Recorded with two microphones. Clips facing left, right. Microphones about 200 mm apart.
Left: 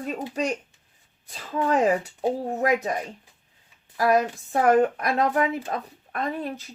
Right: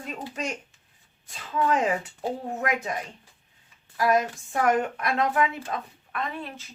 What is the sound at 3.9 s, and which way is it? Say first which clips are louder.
A woman's voice: left 2 dB; 35° left (ahead or behind).